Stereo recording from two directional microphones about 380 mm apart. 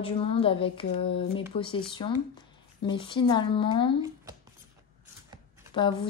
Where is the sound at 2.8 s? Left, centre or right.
Centre.